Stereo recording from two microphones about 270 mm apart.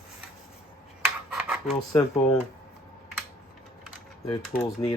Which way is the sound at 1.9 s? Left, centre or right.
Centre.